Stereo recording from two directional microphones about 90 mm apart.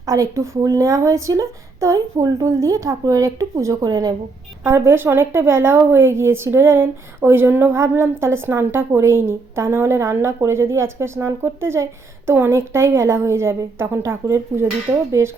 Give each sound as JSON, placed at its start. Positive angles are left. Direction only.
{"t": 0.0, "sound": "speech", "side_deg": -40}
{"t": 4.6, "sound": "a woman's voice", "side_deg": -30}